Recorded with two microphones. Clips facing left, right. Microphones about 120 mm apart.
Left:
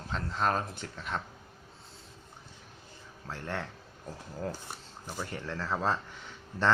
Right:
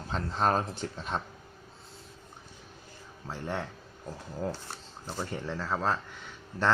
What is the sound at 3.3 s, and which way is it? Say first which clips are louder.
Speech: right 2 dB; 15° right (ahead or behind).